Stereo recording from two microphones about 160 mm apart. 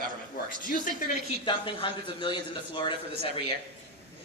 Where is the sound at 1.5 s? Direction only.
30° left (ahead or behind).